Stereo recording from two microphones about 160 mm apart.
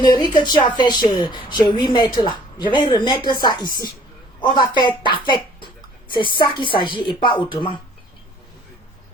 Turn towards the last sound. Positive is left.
turn(degrees=30)  # may be behind; listen again after turning